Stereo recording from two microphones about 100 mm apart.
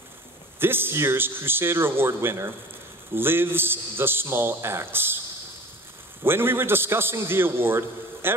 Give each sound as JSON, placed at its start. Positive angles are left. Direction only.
{"t": 0.6, "sound": "a man's voice", "side_deg": -20}
{"t": 6.2, "sound": "a man's voice", "side_deg": -20}